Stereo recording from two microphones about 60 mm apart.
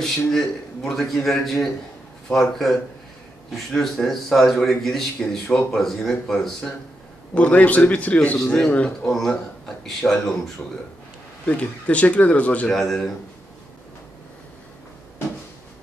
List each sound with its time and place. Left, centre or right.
0.0 s a man's voice: centre
7.3 s speech: left
8.5 s speech: centre
9.1 s a man's voice: centre
10.6 s speech: left
12.6 s a man's voice: centre